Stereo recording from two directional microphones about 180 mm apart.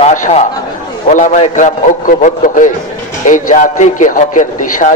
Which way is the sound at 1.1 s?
45° left (ahead or behind).